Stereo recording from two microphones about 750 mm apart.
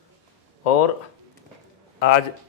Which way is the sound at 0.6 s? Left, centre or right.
Left.